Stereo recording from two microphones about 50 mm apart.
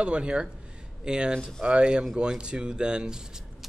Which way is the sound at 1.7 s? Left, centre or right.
Centre.